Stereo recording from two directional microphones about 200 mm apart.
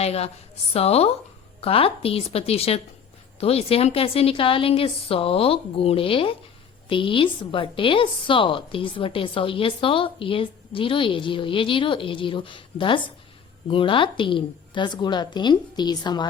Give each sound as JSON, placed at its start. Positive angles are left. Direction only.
{"t": 0.0, "sound": "a woman's voice", "side_deg": 30}